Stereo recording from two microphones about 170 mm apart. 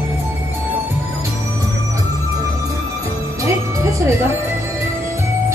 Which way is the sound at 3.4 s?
15° right (ahead or behind).